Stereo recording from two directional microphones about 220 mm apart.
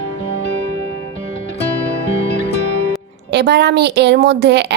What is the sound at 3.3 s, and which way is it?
Speech, 50° right (ahead or behind).